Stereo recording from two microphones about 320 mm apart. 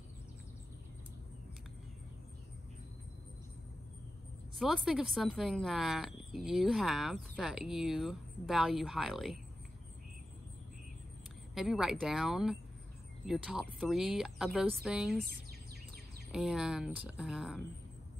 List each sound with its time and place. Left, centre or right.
4.6 s speech: centre
11.5 s speech: centre
16.3 s speech: centre